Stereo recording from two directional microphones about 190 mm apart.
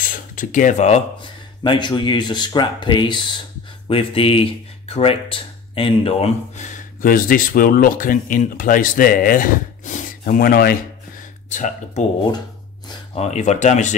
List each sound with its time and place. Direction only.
0.1 s speech: 45° left (ahead or behind)
11.4 s speech: 40° left (ahead or behind)